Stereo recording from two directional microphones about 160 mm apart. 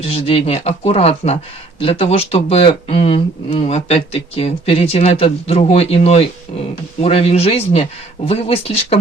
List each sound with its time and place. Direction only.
0.0 s speech: 35° left (ahead or behind)